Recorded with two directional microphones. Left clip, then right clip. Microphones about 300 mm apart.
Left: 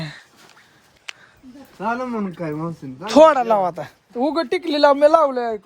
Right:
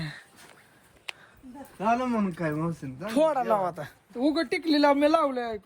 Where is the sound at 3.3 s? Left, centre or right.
Left.